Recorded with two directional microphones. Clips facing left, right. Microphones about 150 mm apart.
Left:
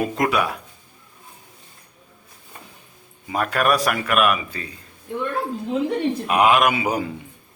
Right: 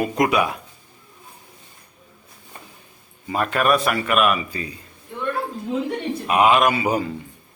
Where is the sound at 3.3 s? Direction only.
Centre (ahead or behind).